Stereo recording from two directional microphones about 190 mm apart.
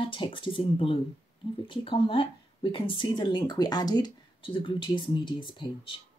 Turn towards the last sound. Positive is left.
turn(degrees=25)  # may be behind; listen again after turning